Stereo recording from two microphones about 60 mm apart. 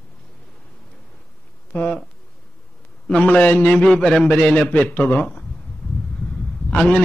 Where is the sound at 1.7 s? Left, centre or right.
Left.